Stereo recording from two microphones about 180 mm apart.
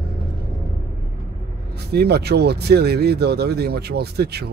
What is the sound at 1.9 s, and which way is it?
Speech, 65° right (ahead or behind).